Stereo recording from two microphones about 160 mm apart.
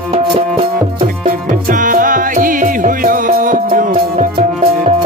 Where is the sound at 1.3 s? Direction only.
60° right (ahead or behind).